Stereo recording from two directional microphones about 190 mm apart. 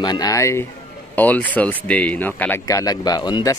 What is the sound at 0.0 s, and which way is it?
Speech, 20° left (ahead or behind).